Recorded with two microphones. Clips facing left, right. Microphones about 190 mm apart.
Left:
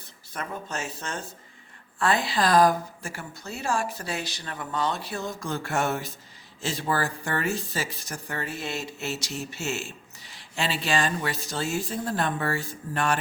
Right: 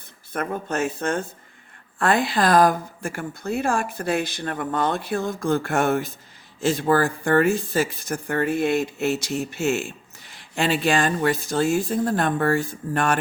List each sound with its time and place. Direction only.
0.3 s speech: 55° right (ahead or behind)